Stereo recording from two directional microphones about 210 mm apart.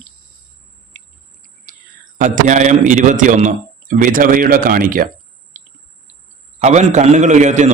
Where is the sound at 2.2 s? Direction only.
35° right (ahead or behind).